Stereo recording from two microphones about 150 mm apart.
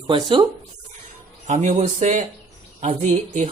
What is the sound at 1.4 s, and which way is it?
Speech, 55° right (ahead or behind).